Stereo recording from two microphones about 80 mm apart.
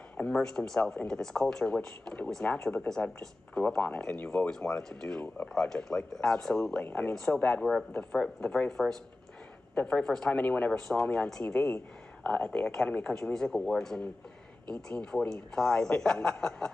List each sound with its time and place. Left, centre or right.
0.2 s speech: centre
6.9 s speech: left
7.2 s speech: centre